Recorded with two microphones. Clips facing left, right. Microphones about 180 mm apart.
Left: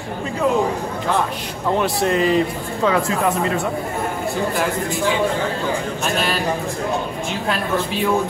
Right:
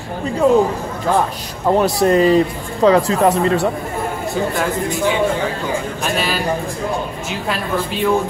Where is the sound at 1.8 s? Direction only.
40° right (ahead or behind).